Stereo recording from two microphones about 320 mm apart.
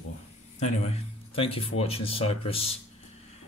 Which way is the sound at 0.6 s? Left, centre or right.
Centre.